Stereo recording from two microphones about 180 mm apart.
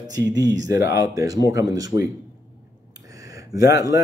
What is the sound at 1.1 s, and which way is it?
Speech, 20° right (ahead or behind).